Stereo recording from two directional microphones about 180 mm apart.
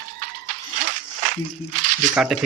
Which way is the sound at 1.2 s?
45° right (ahead or behind).